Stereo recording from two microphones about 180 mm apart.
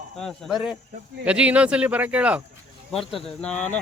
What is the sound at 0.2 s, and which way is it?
Speech, centre (ahead or behind).